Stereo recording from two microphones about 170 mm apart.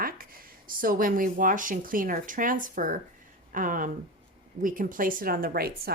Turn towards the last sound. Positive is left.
turn(degrees=-60)  # may be behind; listen again after turning